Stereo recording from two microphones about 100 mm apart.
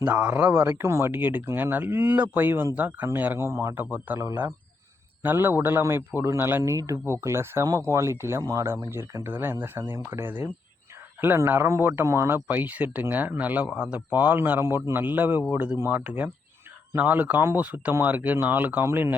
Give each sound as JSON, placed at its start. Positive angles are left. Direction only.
{"t": 0.0, "sound": "a man's voice", "side_deg": -20}